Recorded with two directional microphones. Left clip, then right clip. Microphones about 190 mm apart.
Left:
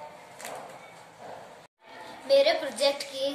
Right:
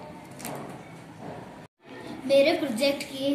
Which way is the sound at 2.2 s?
15° left (ahead or behind).